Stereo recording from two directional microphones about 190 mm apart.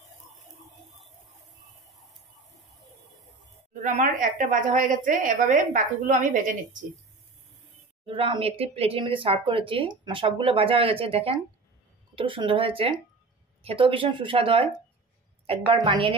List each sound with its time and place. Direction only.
3.8 s a woman's voice: 45° right (ahead or behind)
8.1 s speech: 30° right (ahead or behind)
15.7 s speech: 30° right (ahead or behind)